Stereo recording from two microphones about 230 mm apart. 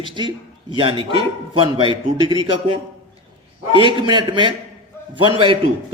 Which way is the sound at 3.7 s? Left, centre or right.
Right.